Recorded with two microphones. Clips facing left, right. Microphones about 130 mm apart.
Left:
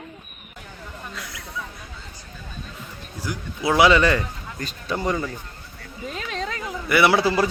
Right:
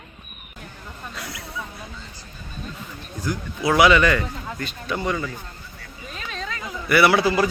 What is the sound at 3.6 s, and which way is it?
A man's voice, 25° left (ahead or behind).